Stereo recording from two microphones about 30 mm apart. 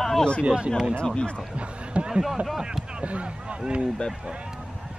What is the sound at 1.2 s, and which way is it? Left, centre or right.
Speech, left.